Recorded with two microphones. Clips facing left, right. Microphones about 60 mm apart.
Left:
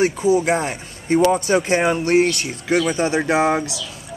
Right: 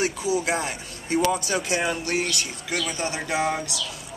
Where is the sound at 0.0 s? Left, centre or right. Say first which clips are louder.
Left 8 dB; left.